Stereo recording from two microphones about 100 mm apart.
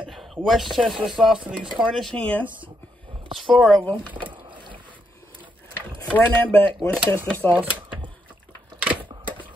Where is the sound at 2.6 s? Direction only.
55° right (ahead or behind).